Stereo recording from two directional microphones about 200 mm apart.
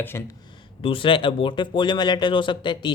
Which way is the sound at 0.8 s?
25° left (ahead or behind).